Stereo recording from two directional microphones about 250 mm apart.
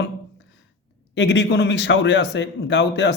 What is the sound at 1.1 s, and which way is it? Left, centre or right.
Speech, left.